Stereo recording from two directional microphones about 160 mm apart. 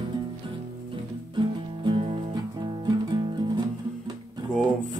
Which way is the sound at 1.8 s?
30° right (ahead or behind).